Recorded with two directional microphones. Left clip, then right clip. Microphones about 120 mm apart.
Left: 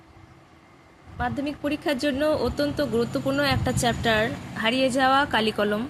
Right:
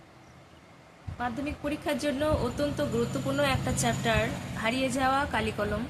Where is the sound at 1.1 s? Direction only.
65° left (ahead or behind); by 5.7 s 90° left.